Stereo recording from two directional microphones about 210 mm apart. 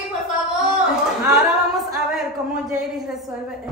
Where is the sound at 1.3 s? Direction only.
Centre (ahead or behind).